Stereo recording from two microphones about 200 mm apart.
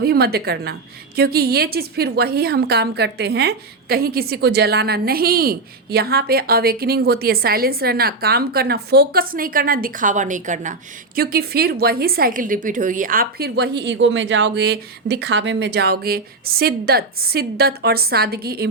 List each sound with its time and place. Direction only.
0.0 s a woman's voice: 50° right (ahead or behind)